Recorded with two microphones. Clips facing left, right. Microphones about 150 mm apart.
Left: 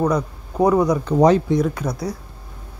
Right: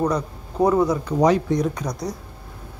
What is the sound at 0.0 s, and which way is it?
A man's voice, 10° left (ahead or behind).